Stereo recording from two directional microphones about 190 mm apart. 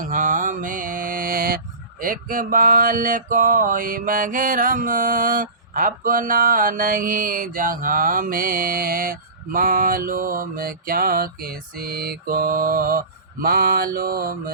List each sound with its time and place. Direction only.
0.0 s mantra: 45° right (ahead or behind)